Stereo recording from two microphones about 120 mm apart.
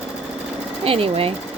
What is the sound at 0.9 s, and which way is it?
Speech, 50° right (ahead or behind).